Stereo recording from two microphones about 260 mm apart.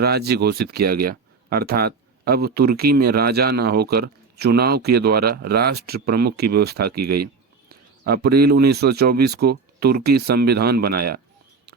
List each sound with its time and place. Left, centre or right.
0.0 s speech: right
6.9 s speech: right
7.7 s a man's voice: right